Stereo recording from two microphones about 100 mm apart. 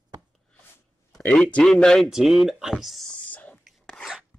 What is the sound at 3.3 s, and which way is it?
Whispering, 15° left (ahead or behind).